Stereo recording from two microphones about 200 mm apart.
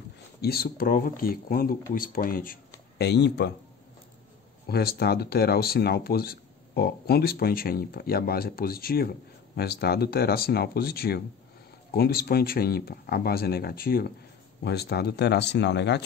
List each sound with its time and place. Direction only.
0.4 s speech: 50° left (ahead or behind)
3.0 s speech: 60° left (ahead or behind)
4.6 s speech: 50° left (ahead or behind)